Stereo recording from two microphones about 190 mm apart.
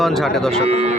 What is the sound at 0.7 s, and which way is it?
Moo, 35° right (ahead or behind).